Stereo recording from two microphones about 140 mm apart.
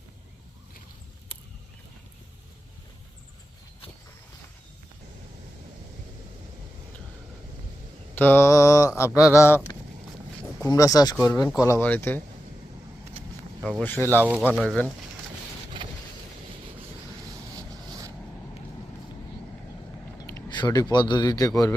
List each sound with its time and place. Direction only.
8.1 s mantra: 15° left (ahead or behind)
9.0 s a sound: 20° left (ahead or behind)
10.6 s a sound: 25° left (ahead or behind)
11.9 s speech: 15° left (ahead or behind)
13.7 s speech: 10° left (ahead or behind)
14.3 s speech: 10° right (ahead or behind)
14.5 s speech: centre (ahead or behind)
15.8 s vehicle: 35° right (ahead or behind)
17.5 s vehicle: 25° right (ahead or behind)
20.1 s speech: 25° left (ahead or behind)